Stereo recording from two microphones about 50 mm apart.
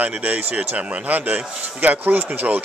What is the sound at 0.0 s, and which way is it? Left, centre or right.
Speech, right.